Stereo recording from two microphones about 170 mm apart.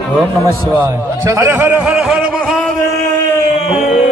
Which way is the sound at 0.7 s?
15° right (ahead or behind).